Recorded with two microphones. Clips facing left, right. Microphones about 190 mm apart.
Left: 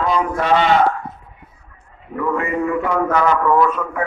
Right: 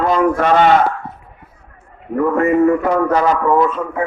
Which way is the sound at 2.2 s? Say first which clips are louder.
Right 7 dB; 45° right (ahead or behind).